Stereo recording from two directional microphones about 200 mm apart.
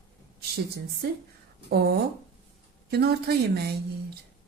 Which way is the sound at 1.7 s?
55° right (ahead or behind).